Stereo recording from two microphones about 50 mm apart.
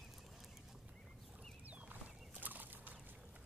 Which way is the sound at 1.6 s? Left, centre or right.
Right.